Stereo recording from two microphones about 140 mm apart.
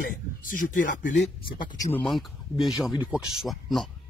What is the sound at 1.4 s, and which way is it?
Speech, 35° left (ahead or behind).